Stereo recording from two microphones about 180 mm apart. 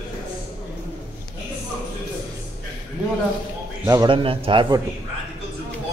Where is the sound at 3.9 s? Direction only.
25° right (ahead or behind).